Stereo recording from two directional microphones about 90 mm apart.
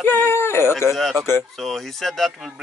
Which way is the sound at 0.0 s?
25° left (ahead or behind).